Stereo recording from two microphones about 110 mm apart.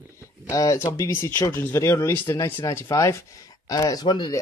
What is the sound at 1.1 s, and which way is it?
Speech, 20° left (ahead or behind).